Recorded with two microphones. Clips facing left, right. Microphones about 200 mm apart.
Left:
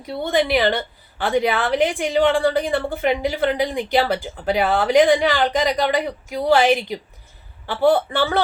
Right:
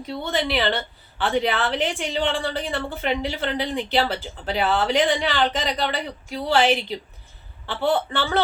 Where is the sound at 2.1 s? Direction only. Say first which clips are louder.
Left 8 dB; 50° left (ahead or behind).